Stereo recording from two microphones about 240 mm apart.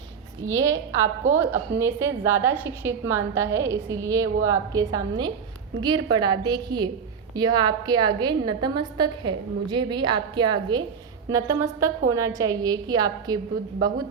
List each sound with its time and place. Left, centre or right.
0.4 s a woman's voice: centre